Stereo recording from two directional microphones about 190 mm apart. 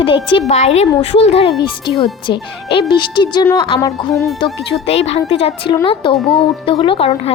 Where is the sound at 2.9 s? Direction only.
25° left (ahead or behind).